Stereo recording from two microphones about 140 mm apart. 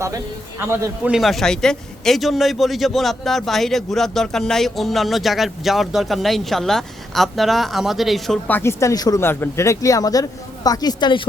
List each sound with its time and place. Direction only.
0.7 s a man's voice: 15° right (ahead or behind)
1.1 s a man's voice: centre (ahead or behind)
8.4 s speech: 15° left (ahead or behind)